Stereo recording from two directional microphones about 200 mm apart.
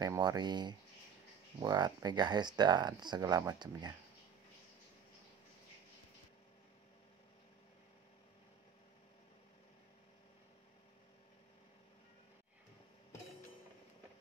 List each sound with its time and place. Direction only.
0.0 s speech: 20° right (ahead or behind)